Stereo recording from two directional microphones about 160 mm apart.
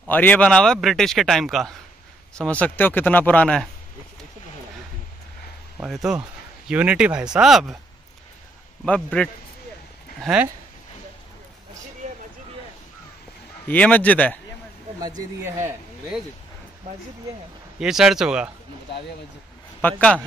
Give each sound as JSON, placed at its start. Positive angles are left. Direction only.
{"t": 0.1, "sound": "a man's voice", "side_deg": 10}
{"t": 5.8, "sound": "a man's voice", "side_deg": 0}
{"t": 8.8, "sound": "speech", "side_deg": 5}
{"t": 10.2, "sound": "speech", "side_deg": -5}
{"t": 13.7, "sound": "speech", "side_deg": 10}
{"t": 15.0, "sound": "speech", "side_deg": -25}
{"t": 17.7, "sound": "a man's voice", "side_deg": -5}
{"t": 19.8, "sound": "speech", "side_deg": 10}